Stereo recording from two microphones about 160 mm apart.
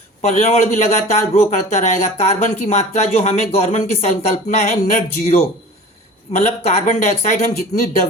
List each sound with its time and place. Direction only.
0.2 s speech: 45° left (ahead or behind)